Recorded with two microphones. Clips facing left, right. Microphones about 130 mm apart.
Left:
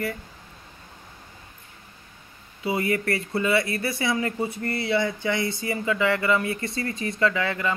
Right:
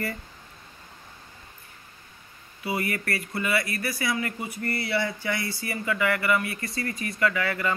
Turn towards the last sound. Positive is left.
turn(degrees=20)  # may be behind; listen again after turning